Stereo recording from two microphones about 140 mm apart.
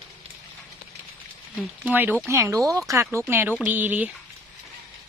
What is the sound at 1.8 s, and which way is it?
Speech, 10° right (ahead or behind).